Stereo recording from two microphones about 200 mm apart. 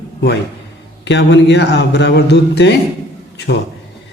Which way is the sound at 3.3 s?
60° left (ahead or behind).